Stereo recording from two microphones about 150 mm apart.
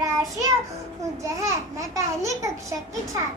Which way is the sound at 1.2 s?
20° right (ahead or behind).